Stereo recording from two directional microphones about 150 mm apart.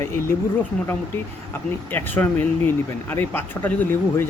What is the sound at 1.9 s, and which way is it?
Speech, 15° left (ahead or behind).